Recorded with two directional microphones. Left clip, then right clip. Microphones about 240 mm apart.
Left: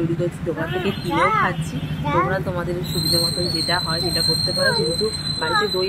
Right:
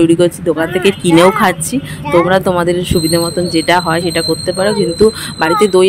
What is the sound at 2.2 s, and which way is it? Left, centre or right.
Speech, right.